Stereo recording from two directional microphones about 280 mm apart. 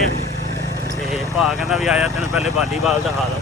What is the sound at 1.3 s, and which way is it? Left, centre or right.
Speech, centre.